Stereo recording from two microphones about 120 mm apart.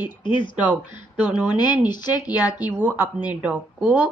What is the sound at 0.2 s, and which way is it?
Speech, 40° left (ahead or behind).